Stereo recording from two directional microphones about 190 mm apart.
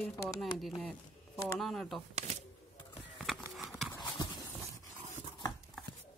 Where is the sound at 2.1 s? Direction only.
35° right (ahead or behind).